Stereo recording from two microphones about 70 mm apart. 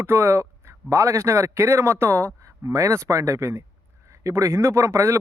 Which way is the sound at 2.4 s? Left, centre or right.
Right.